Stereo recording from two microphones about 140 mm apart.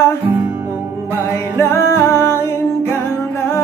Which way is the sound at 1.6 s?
20° left (ahead or behind).